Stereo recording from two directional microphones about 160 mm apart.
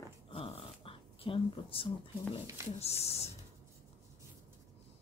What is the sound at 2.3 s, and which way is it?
Speech, 40° left (ahead or behind).